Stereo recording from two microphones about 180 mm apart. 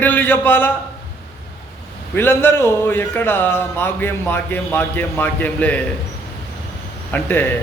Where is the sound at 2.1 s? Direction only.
10° left (ahead or behind).